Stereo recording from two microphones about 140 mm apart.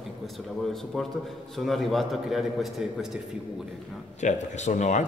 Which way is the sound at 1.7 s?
Centre (ahead or behind).